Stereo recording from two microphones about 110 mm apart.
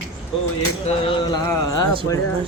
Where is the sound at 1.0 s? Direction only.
45° left (ahead or behind).